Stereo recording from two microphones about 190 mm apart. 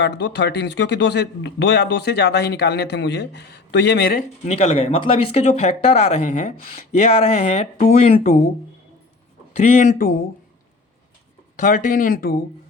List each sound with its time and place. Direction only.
0.0 s a man's voice: 65° left (ahead or behind)
4.4 s speech: 35° left (ahead or behind)
6.6 s speech: 45° left (ahead or behind)
9.6 s speech: 35° left (ahead or behind)
11.5 s speech: 45° left (ahead or behind)